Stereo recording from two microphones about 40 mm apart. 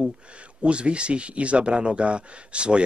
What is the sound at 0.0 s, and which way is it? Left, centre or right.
Speech, right.